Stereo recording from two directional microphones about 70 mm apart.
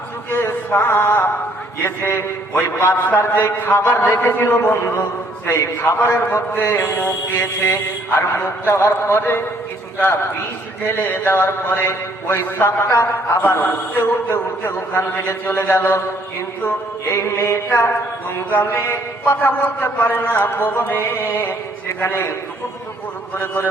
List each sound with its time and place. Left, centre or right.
0.3 s a sound: left
1.8 s speech: left
10.8 s a man's voice: left